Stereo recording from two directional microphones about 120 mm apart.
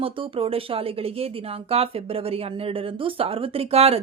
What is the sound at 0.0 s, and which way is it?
Speech, 50° right (ahead or behind).